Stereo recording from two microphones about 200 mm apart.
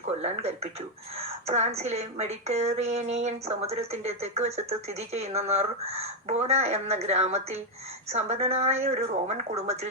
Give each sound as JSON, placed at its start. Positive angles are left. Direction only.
{"t": 0.0, "sound": "speech", "side_deg": -35}